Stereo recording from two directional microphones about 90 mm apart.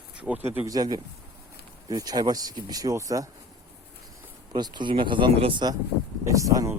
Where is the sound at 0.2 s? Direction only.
20° right (ahead or behind).